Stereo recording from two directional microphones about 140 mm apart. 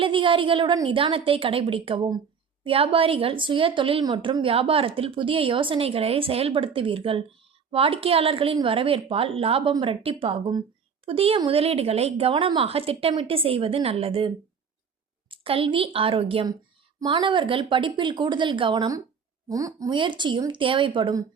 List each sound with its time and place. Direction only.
0.0 s a woman's voice: 40° right (ahead or behind)
19.5 s a woman's voice: 25° right (ahead or behind)